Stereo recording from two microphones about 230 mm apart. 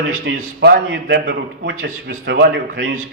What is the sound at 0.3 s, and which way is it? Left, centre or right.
A man's voice, right.